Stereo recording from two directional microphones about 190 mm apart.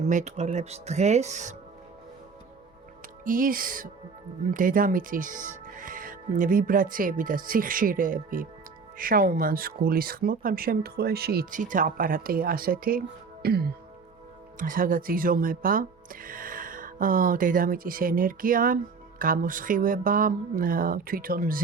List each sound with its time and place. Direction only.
0.1 s speech: 40° right (ahead or behind)
3.2 s speech: 45° right (ahead or behind)